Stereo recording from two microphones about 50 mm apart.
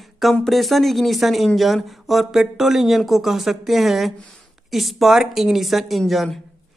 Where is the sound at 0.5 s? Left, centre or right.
Centre.